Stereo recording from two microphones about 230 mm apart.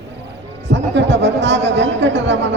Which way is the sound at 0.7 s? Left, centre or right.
Right.